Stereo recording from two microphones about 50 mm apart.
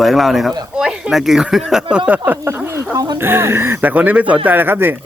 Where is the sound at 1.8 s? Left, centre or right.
Right.